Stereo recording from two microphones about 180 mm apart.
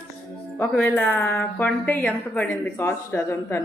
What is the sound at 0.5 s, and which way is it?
A woman's voice, 5° left (ahead or behind).